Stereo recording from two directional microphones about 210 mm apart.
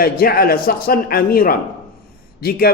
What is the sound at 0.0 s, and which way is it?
A man's voice, 45° left (ahead or behind).